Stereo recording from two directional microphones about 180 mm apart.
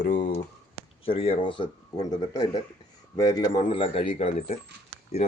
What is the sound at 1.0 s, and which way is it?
Speech, 30° left (ahead or behind).